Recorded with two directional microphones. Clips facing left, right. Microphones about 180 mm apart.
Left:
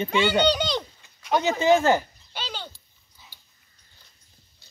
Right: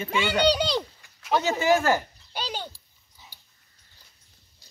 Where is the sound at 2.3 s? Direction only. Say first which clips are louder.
Right 3 dB; 40° right (ahead or behind).